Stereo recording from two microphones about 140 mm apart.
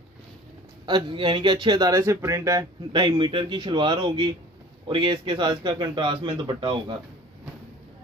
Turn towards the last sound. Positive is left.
turn(degrees=-35)  # may be behind; listen again after turning